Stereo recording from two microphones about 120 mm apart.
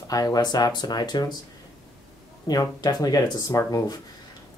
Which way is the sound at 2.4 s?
35° left (ahead or behind).